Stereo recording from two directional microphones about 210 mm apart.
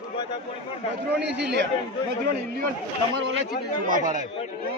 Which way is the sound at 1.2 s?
55° right (ahead or behind).